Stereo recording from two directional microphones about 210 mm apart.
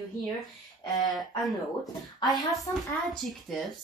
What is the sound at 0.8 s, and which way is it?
Speech, 20° left (ahead or behind).